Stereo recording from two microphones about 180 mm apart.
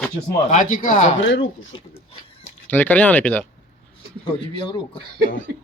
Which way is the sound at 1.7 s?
30° left (ahead or behind).